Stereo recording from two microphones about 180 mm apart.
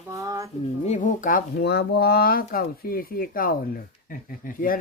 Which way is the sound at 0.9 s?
45° left (ahead or behind).